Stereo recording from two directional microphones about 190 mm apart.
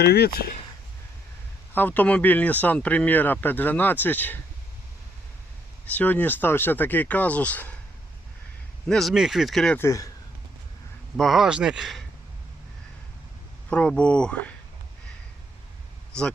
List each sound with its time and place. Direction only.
0.0 s speech: 55° left (ahead or behind)
1.7 s speech: 10° left (ahead or behind)
5.8 s speech: 10° left (ahead or behind)
8.9 s speech: centre (ahead or behind)
11.2 s speech: centre (ahead or behind)
13.7 s speech: 5° left (ahead or behind)
16.1 s speech: 5° left (ahead or behind)